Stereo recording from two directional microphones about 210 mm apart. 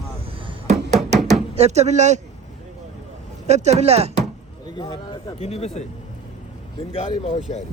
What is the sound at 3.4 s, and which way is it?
Speech, 30° right (ahead or behind).